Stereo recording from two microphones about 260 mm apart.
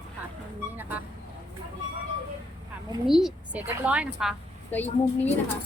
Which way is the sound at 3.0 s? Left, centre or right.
Centre.